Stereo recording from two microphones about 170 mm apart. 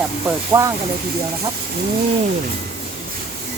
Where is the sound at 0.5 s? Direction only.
15° right (ahead or behind).